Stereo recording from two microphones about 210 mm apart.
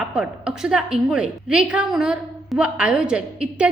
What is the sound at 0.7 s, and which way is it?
A woman's voice, 5° right (ahead or behind).